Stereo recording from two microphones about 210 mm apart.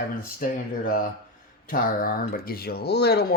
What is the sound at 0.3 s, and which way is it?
Speech, 40° left (ahead or behind).